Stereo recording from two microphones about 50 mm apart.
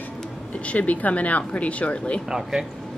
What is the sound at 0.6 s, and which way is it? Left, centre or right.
Speech, left.